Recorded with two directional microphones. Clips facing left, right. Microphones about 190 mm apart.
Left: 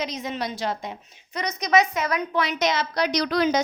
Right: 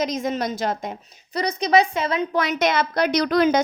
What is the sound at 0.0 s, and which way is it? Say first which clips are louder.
Speech: right 5 dB; 45° right (ahead or behind).